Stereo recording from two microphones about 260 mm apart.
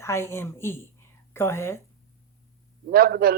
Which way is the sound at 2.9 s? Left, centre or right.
Right.